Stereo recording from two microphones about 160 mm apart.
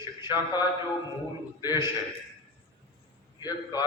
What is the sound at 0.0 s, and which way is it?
Speech, 25° left (ahead or behind).